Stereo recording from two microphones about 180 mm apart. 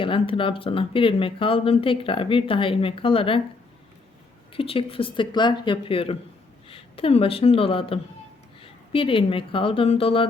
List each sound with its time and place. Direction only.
0.0 s speech: 30° left (ahead or behind)
4.5 s speech: 30° left (ahead or behind)